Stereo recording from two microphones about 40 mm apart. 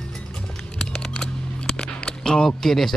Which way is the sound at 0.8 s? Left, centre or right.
Left.